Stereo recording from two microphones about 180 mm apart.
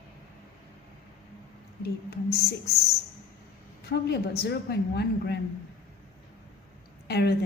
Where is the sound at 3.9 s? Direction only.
65° left (ahead or behind).